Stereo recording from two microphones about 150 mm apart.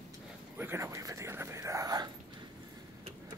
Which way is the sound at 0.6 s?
15° right (ahead or behind).